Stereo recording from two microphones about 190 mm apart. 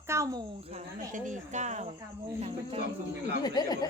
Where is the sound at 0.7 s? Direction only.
40° right (ahead or behind).